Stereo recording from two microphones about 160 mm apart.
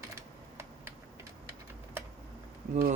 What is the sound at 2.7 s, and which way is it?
Speech, 45° right (ahead or behind).